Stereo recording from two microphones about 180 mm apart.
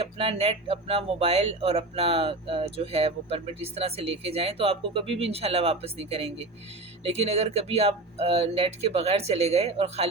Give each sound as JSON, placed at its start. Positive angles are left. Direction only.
{"t": 0.0, "sound": "speech", "side_deg": -35}